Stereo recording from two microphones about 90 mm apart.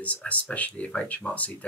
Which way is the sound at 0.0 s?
15° left (ahead or behind).